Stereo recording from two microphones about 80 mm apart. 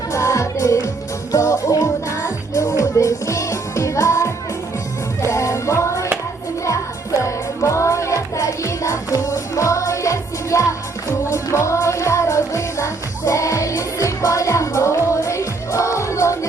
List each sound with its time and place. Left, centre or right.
0.1 s music: left